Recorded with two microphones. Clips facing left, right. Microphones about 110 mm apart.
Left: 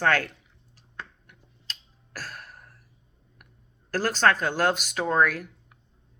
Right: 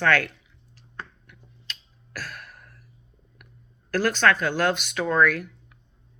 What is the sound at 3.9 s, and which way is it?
Speech, 40° left (ahead or behind).